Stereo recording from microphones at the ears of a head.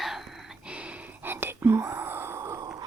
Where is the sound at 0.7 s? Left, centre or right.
Centre.